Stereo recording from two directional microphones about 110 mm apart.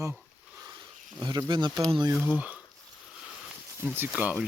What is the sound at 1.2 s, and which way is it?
Speech, 40° right (ahead or behind).